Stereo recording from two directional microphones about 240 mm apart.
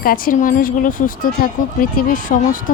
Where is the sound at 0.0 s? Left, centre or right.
Left.